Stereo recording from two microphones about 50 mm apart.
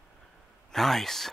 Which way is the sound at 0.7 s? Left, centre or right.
Centre.